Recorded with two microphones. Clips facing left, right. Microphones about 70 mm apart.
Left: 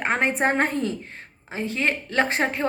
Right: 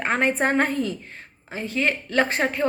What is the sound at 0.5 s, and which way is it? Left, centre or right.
A woman's voice, left.